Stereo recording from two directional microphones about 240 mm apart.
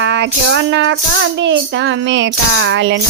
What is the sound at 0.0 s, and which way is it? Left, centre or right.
Music, right.